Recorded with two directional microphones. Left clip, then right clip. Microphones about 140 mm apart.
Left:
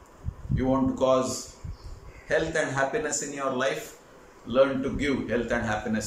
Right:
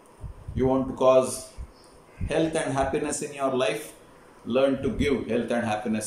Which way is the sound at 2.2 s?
20° right (ahead or behind).